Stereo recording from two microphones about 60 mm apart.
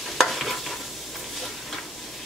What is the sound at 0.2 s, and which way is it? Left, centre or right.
Stir, centre.